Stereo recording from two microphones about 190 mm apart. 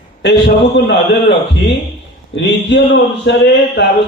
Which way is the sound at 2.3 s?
70° left (ahead or behind).